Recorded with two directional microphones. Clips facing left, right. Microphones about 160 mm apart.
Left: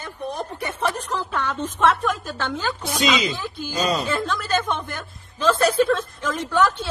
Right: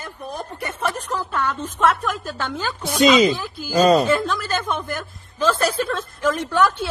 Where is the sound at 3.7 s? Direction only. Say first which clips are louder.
Right 9 dB; 50° right (ahead or behind).